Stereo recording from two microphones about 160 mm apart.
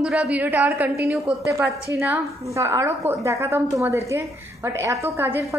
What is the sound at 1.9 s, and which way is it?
A woman's voice, 15° right (ahead or behind).